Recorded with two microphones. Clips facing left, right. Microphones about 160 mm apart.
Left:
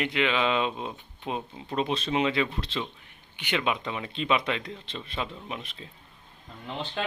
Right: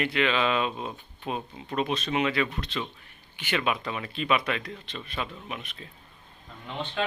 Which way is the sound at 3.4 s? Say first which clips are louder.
Even; 15° left (ahead or behind).